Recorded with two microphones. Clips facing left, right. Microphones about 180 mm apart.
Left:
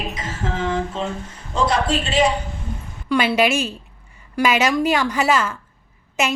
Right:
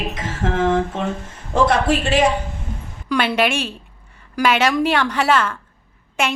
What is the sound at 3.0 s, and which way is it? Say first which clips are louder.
A woman's voice: left 1 dB; 5° left (ahead or behind).